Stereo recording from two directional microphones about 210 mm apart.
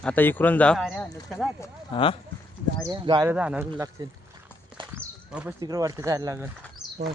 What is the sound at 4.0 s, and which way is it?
Speech, 20° right (ahead or behind).